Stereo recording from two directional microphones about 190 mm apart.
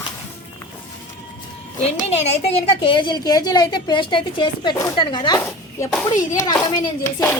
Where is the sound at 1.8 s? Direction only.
35° left (ahead or behind).